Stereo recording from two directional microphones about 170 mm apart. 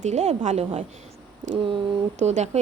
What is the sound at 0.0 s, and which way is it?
Speech, 40° right (ahead or behind).